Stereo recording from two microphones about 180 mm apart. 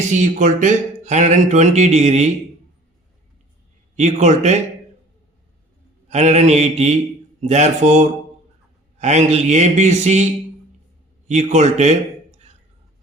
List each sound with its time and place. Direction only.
0.1 s speech: 45° right (ahead or behind)
3.9 s speech: 40° right (ahead or behind)
6.1 s speech: 40° right (ahead or behind)
11.3 s a man's voice: 40° right (ahead or behind)